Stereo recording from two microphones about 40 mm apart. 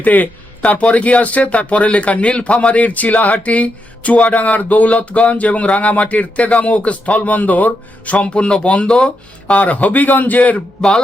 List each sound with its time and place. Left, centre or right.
0.0 s a man's voice: left
10.8 s speech: centre